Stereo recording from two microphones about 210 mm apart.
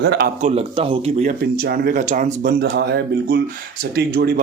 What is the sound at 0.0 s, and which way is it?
Speech, 55° right (ahead or behind).